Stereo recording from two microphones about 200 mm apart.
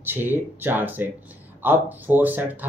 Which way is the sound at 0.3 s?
10° right (ahead or behind).